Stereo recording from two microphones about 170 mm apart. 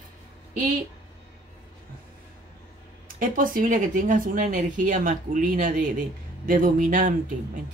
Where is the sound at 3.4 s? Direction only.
55° right (ahead or behind).